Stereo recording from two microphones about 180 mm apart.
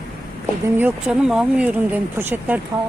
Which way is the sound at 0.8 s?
5° right (ahead or behind).